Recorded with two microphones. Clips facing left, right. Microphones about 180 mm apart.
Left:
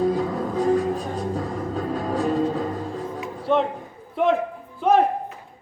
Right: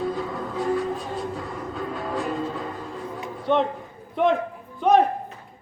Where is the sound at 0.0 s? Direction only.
40° left (ahead or behind).